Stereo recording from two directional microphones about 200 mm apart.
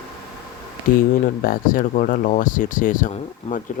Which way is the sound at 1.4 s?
45° left (ahead or behind).